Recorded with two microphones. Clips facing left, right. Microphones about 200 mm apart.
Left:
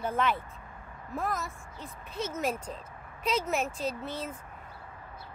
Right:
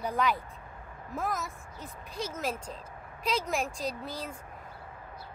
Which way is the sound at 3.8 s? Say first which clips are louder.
Left 2 dB; 35° right (ahead or behind).